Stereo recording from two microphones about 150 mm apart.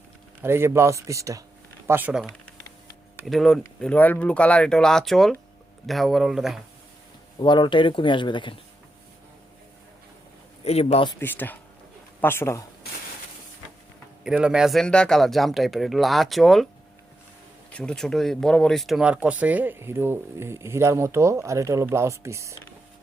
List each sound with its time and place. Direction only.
0.4 s speech: 15° right (ahead or behind)
3.2 s speech: centre (ahead or behind)
7.3 s speech: 30° left (ahead or behind)
10.6 s a man's voice: 45° left (ahead or behind)
11.2 s speech: 15° left (ahead or behind)
14.3 s speech: 5° right (ahead or behind)
17.7 s speech: 5° left (ahead or behind); by 22.5 s 20° right (ahead or behind)